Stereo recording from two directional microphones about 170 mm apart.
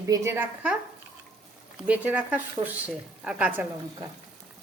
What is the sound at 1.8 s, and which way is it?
A woman's voice, 10° right (ahead or behind).